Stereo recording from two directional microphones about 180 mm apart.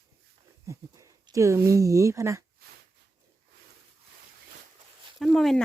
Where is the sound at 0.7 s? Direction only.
15° right (ahead or behind).